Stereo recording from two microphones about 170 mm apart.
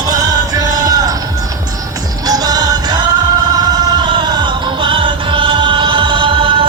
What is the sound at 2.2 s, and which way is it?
Music, 20° right (ahead or behind).